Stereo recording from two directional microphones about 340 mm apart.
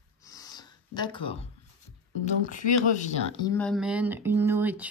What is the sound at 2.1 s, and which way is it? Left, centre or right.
Speech, left.